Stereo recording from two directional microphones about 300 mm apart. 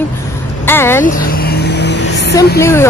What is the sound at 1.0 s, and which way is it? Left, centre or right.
Vehicle, left.